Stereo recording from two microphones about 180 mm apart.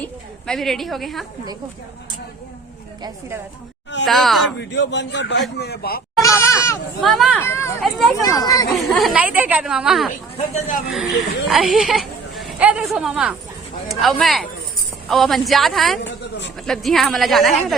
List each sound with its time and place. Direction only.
0.0 s a woman's voice: 5° left (ahead or behind)
4.0 s speech: centre (ahead or behind)
4.7 s a man's voice: 75° left (ahead or behind)
5.5 s a man's voice: 65° left (ahead or behind)
6.2 s speech: 15° left (ahead or behind)
7.0 s speech: centre (ahead or behind)
7.3 s speech: 15° left (ahead or behind)
7.8 s speech: centre (ahead or behind)
8.1 s speech: 20° left (ahead or behind)
8.7 s speech: centre (ahead or behind)
10.1 s speech: 45° left (ahead or behind)
11.4 s a sound: centre (ahead or behind)
13.8 s speech: centre (ahead or behind)